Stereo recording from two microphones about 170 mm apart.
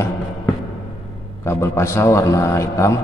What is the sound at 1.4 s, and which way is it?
A man's voice, 15° left (ahead or behind).